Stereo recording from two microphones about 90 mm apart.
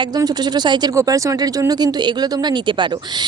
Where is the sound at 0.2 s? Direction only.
50° right (ahead or behind).